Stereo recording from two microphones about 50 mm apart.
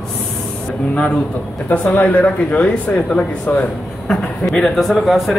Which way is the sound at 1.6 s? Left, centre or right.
Left.